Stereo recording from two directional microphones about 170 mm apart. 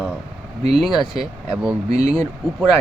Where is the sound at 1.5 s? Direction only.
5° right (ahead or behind).